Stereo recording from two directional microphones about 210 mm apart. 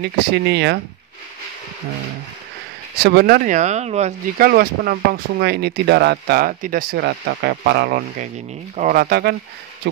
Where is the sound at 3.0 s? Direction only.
50° right (ahead or behind); by 4.5 s 30° right (ahead or behind).